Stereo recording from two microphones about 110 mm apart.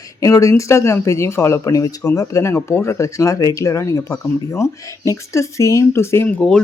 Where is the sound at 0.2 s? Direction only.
30° left (ahead or behind).